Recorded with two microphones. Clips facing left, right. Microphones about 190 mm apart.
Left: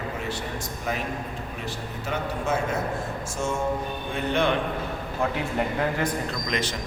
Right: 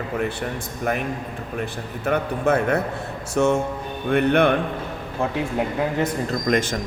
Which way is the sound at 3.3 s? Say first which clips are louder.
Right 11 dB; 65° right (ahead or behind).